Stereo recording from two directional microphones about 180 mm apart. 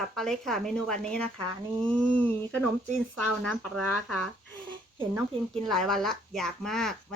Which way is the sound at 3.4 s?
5° left (ahead or behind).